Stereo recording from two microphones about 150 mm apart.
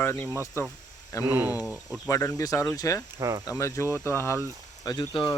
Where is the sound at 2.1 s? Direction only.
20° left (ahead or behind).